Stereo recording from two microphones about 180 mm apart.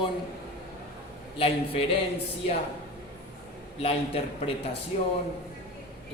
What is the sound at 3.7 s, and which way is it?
A man's voice, 30° left (ahead or behind).